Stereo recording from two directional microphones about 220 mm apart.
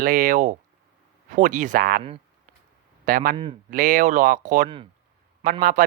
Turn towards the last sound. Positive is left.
turn(degrees=-40)  # may be behind; listen again after turning